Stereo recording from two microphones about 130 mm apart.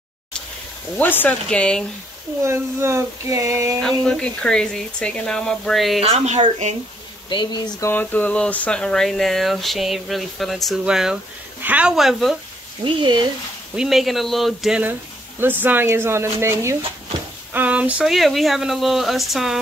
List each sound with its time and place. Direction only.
0.9 s speech: 15° left (ahead or behind)
2.4 s a sound: 20° right (ahead or behind)
3.8 s speech: 5° left (ahead or behind)
5.9 s speech: 50° right (ahead or behind)
7.2 s speech: 35° left (ahead or behind)
7.8 s speech: 15° left (ahead or behind)
12.8 s speech: 35° right (ahead or behind)
13.7 s speech: centre (ahead or behind)
15.6 s a sound: 15° right (ahead or behind)
17.5 s speech: 10° right (ahead or behind)